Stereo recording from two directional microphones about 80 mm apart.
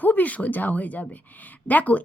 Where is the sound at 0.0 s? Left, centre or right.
Left.